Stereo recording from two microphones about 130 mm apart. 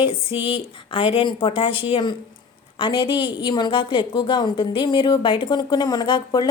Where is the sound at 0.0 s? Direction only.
40° left (ahead or behind).